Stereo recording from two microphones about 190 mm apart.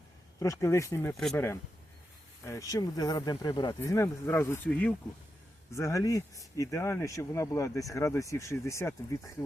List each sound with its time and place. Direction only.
0.3 s speech: 15° left (ahead or behind)
1.1 s speech: centre (ahead or behind)
2.4 s speech: 15° left (ahead or behind)